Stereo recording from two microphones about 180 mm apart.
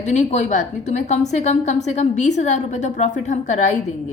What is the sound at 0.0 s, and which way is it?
A woman's voice, 40° left (ahead or behind).